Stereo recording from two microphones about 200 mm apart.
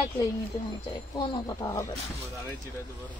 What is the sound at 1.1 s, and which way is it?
Speech, 20° left (ahead or behind).